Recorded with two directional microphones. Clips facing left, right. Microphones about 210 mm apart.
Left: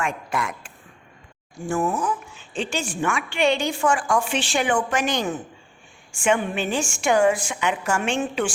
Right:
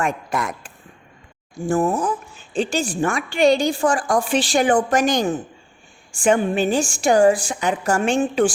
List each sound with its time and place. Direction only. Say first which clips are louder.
0.0 s a woman's voice: right 3 dB; 40° right (ahead or behind)